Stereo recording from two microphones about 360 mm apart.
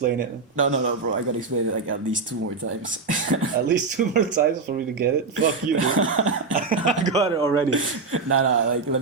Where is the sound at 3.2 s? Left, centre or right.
Right.